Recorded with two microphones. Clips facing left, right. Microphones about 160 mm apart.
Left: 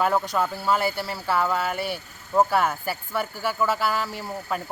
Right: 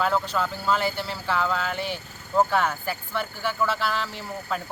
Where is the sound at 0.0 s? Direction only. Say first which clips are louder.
Left 2 dB; 15° left (ahead or behind).